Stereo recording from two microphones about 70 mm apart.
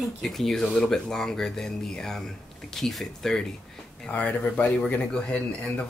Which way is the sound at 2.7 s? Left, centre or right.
Centre.